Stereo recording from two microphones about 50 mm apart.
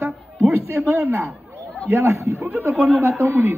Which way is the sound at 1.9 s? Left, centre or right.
Right.